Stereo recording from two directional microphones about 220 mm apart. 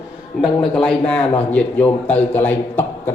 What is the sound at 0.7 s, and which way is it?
A man's voice, 5° left (ahead or behind).